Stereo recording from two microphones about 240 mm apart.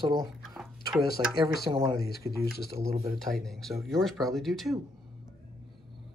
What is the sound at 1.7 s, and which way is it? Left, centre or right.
Speech, centre.